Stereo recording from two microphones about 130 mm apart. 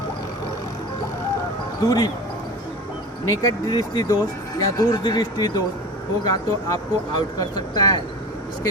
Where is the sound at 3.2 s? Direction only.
25° left (ahead or behind).